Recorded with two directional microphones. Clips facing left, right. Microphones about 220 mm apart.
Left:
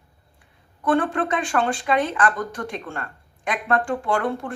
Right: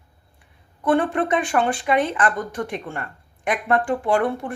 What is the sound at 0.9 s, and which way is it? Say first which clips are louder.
A woman's voice: right 2 dB; 20° right (ahead or behind).